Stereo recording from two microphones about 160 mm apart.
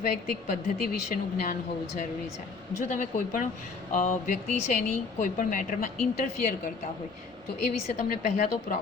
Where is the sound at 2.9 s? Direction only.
55° left (ahead or behind).